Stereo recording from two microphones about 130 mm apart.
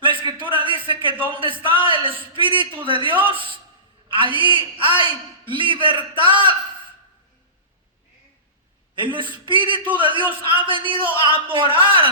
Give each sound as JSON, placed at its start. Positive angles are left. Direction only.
{"t": 0.0, "sound": "a sound", "side_deg": -40}
{"t": 1.3, "sound": "a man's voice", "side_deg": -40}
{"t": 9.0, "sound": "a man's voice", "side_deg": -40}